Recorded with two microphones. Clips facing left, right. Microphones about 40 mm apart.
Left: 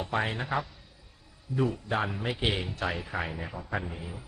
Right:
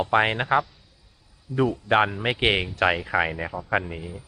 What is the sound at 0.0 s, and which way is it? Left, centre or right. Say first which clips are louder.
Speech: right 9 dB; right.